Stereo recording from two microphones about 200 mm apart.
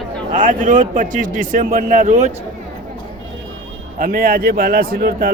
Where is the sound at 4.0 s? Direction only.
45° right (ahead or behind).